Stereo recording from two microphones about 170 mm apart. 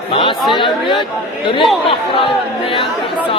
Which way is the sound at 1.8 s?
30° left (ahead or behind).